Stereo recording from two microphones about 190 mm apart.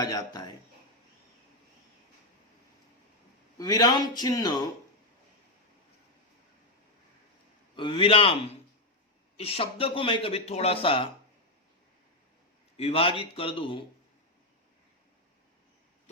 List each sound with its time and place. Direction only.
0.0 s a man's voice: 20° left (ahead or behind)
3.6 s a man's voice: 20° left (ahead or behind)
7.8 s a man's voice: 25° left (ahead or behind)
12.7 s a man's voice: 30° left (ahead or behind)